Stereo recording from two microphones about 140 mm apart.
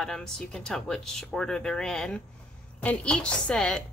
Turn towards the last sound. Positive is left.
turn(degrees=5)  # may be behind; listen again after turning